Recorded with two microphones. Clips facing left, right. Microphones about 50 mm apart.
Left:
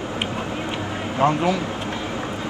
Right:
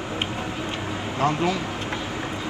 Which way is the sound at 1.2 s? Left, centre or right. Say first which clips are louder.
Left 4 dB; left.